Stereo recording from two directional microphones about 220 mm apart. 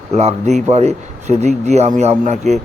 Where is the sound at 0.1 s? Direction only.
30° right (ahead or behind).